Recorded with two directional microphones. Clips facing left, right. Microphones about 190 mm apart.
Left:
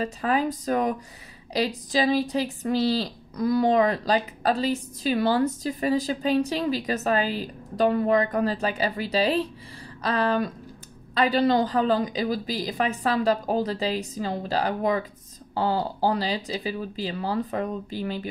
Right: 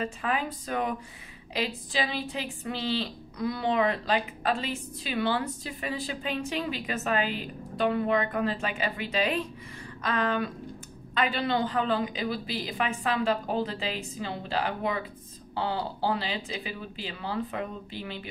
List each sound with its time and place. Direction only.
0.0 s speech: 35° left (ahead or behind)